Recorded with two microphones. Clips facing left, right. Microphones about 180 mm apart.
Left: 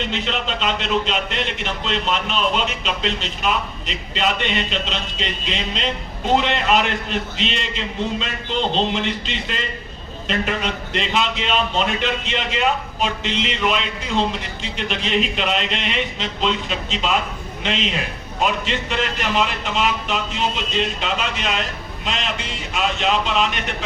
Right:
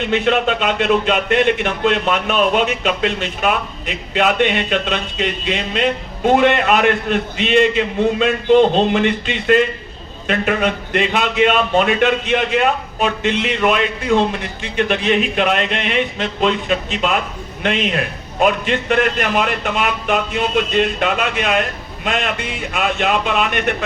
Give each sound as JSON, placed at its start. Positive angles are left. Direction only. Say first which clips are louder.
{"t": 0.0, "sound": "speech", "louder": "right 9 dB", "side_deg": -55}